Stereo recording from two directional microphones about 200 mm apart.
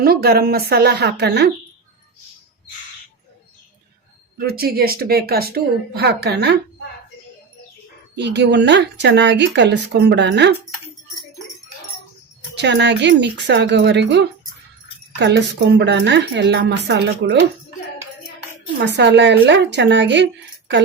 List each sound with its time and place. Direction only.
0.0 s speech: 50° right (ahead or behind)
4.4 s speech: 50° right (ahead or behind)
8.1 s speech: 60° right (ahead or behind)
12.5 s speech: 60° right (ahead or behind)
18.8 s speech: 60° right (ahead or behind)